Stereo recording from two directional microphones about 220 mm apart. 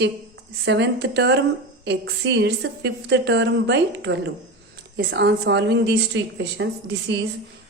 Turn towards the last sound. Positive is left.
turn(degrees=-50)  # may be behind; listen again after turning